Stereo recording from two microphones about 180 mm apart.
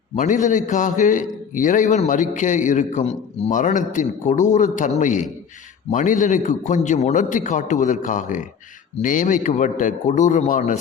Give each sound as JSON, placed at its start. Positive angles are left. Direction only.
{"t": 0.2, "sound": "a man's voice", "side_deg": 45}